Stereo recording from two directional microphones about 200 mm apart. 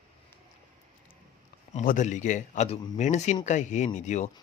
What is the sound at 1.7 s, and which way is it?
Speech, 35° left (ahead or behind).